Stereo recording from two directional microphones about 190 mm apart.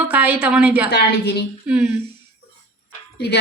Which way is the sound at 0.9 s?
60° left (ahead or behind).